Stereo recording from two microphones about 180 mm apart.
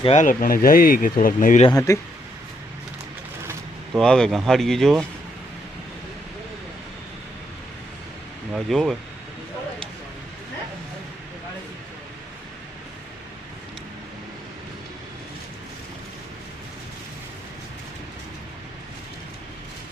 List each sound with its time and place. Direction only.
0.0 s speech: 35° left (ahead or behind)
0.3 s speech: 50° left (ahead or behind)
1.9 s speech: 15° left (ahead or behind)
3.9 s speech: 5° left (ahead or behind)
8.5 s speech: centre (ahead or behind)